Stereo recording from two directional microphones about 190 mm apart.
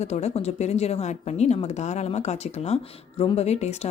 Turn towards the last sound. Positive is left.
turn(degrees=35)  # may be behind; listen again after turning